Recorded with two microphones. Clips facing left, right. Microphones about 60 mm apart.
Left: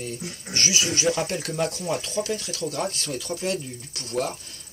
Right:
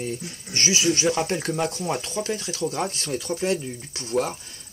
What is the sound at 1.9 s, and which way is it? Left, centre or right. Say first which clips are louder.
Speech: even; right.